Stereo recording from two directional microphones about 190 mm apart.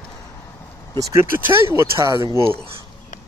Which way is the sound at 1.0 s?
15° right (ahead or behind).